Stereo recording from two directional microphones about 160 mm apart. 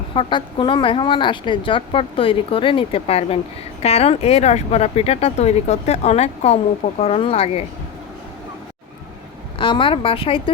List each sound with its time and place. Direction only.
0.1 s speech: 30° left (ahead or behind)
9.6 s speech: 30° left (ahead or behind)